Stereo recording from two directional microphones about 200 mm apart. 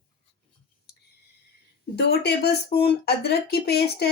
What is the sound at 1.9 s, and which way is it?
Speech, 55° left (ahead or behind).